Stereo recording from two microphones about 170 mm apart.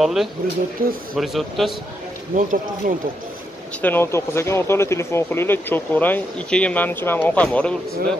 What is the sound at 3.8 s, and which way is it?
Speech, 10° left (ahead or behind).